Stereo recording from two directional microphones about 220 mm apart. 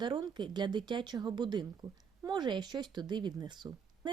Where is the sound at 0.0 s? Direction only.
20° right (ahead or behind).